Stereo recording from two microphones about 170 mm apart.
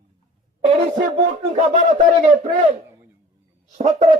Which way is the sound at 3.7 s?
45° right (ahead or behind).